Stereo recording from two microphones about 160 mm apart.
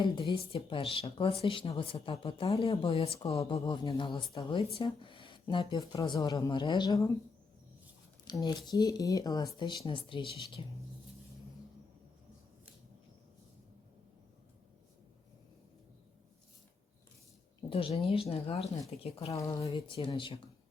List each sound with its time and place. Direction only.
0.0 s speech: 35° left (ahead or behind)
8.2 s speech: 25° left (ahead or behind)
17.7 s speech: 35° left (ahead or behind)